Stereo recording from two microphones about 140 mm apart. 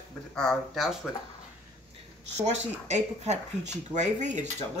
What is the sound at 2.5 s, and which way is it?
Speech, 55° right (ahead or behind).